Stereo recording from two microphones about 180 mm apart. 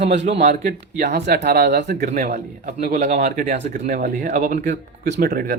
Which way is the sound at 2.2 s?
40° right (ahead or behind).